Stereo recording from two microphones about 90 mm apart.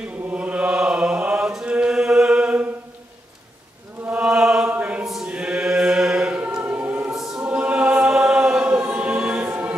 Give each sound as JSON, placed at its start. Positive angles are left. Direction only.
{"t": 0.3, "sound": "mantra", "side_deg": -15}
{"t": 4.0, "sound": "chant", "side_deg": -15}
{"t": 4.6, "sound": "choir", "side_deg": -15}
{"t": 5.0, "sound": "choir", "side_deg": -5}
{"t": 7.2, "sound": "choir", "side_deg": -5}